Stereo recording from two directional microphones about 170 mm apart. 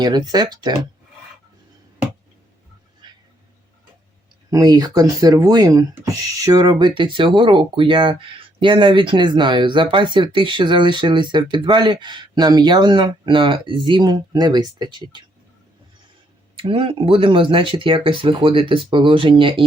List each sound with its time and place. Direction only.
0.0 s speech: 25° right (ahead or behind)
4.5 s speech: 25° right (ahead or behind)
16.6 s speech: 30° right (ahead or behind)